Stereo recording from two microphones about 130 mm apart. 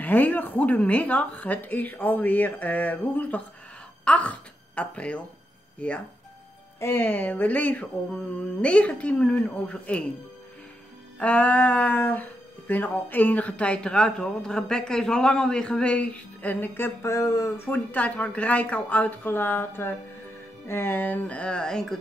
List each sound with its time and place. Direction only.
0.0 s speech: 15° left (ahead or behind)
11.1 s speech: 10° left (ahead or behind)
17.6 s speech: 10° left (ahead or behind)